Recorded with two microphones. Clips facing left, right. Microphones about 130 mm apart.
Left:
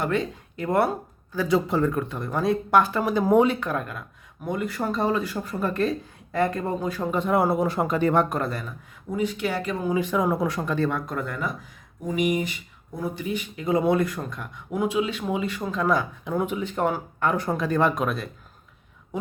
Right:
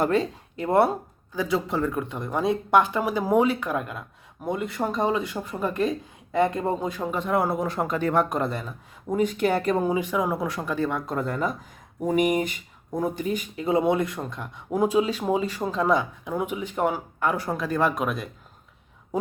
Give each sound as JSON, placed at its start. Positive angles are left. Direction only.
{"t": 0.0, "sound": "speech", "side_deg": -35}
{"t": 1.5, "sound": "speech", "side_deg": 0}
{"t": 2.0, "sound": "speech", "side_deg": -20}
{"t": 7.0, "sound": "speech", "side_deg": 0}
{"t": 8.3, "sound": "speech", "side_deg": -20}
{"t": 9.0, "sound": "speech", "side_deg": -50}
{"t": 9.9, "sound": "speech", "side_deg": -10}
{"t": 10.8, "sound": "speech", "side_deg": -15}
{"t": 11.0, "sound": "speech", "side_deg": -30}
{"t": 12.0, "sound": "speech", "side_deg": -50}
{"t": 13.7, "sound": "speech", "side_deg": -20}
{"t": 16.2, "sound": "speech", "side_deg": -10}